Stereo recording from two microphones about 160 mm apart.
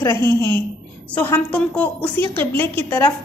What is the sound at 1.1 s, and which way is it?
A woman's voice, 10° left (ahead or behind).